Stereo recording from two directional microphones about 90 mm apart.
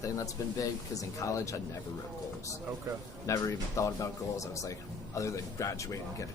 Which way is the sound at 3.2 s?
35° left (ahead or behind).